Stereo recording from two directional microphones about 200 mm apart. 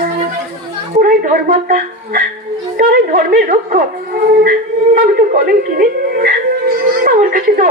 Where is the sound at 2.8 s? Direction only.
45° right (ahead or behind).